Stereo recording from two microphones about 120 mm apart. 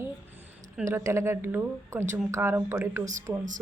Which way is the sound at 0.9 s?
25° right (ahead or behind).